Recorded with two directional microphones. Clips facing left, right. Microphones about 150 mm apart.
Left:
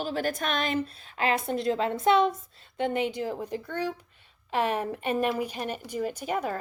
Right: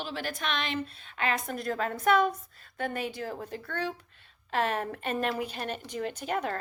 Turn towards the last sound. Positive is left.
turn(degrees=10)  # may be behind; listen again after turning